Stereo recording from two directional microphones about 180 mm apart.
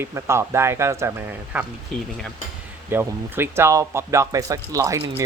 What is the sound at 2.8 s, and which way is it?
Speech, 10° right (ahead or behind).